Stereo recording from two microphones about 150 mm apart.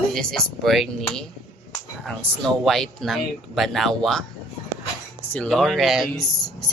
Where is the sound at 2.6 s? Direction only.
Centre (ahead or behind).